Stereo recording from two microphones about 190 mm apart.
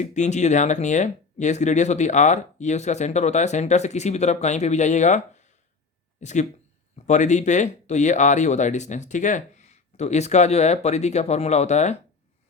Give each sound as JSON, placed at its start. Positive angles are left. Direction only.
{"t": 0.0, "sound": "speech", "side_deg": 40}